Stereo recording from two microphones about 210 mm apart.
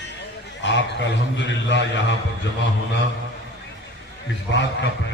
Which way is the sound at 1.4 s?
60° left (ahead or behind).